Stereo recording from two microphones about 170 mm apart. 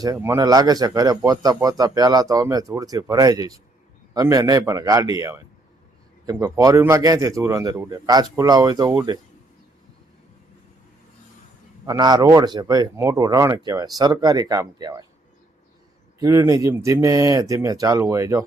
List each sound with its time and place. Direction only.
0.0 s speech: 20° right (ahead or behind)
11.9 s speech: 25° right (ahead or behind)
16.2 s speech: 20° right (ahead or behind)